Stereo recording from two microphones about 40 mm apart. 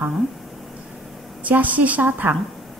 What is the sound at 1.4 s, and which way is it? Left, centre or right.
Speech, right.